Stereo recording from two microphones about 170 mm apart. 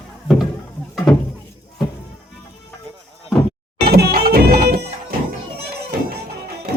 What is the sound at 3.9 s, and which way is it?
Music, 65° right (ahead or behind).